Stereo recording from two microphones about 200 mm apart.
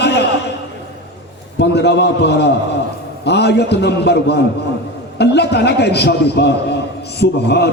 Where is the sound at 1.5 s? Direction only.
55° left (ahead or behind).